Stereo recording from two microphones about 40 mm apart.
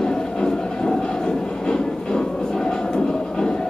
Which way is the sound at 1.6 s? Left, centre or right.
Centre.